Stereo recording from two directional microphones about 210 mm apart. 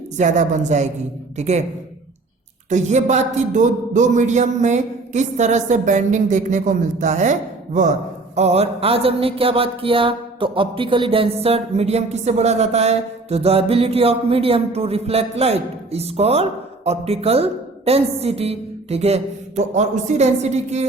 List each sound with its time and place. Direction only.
0.2 s speech: 35° right (ahead or behind)
2.6 s speech: 35° right (ahead or behind)
8.4 s a sound: 30° right (ahead or behind)